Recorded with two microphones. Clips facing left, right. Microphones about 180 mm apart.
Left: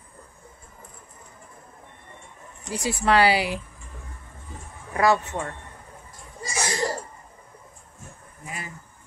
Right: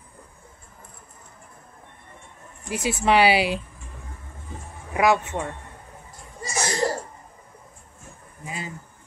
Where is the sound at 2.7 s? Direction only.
20° right (ahead or behind).